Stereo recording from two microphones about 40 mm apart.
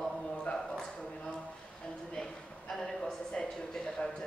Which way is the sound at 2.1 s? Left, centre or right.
Centre.